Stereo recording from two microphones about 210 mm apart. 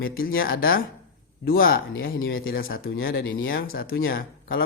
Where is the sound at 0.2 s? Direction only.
45° left (ahead or behind).